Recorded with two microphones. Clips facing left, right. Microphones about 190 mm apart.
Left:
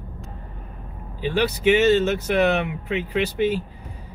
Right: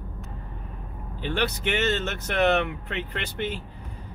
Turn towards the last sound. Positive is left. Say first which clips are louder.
# left 10 dB
turn(degrees=10)  # may be behind; listen again after turning